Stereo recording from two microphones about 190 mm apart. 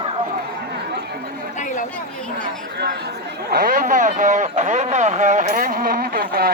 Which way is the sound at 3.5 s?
50° right (ahead or behind).